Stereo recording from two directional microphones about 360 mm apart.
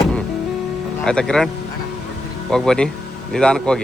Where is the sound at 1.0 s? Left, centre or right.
Centre.